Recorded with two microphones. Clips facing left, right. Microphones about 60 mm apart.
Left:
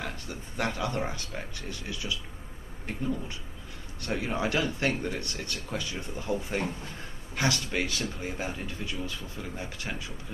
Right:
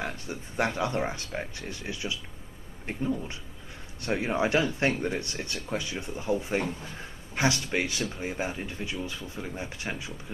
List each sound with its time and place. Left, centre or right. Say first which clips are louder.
0.0 s speech: right 3 dB; right
2.9 s speech: right 2 dB; centre